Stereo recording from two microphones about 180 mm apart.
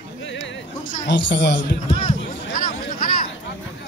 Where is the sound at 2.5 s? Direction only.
50° left (ahead or behind).